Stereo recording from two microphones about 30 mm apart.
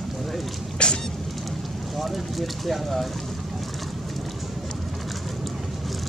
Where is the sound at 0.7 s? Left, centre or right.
Left.